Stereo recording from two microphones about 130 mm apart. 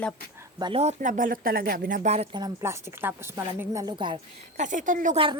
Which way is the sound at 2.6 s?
20° right (ahead or behind).